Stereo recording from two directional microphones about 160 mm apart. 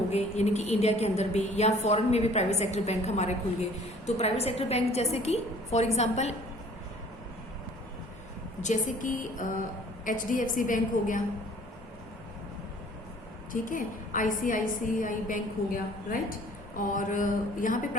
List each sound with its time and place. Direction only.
0.1 s a woman's voice: 45° left (ahead or behind)
8.6 s a woman's voice: 50° left (ahead or behind)
13.5 s a woman's voice: 55° left (ahead or behind)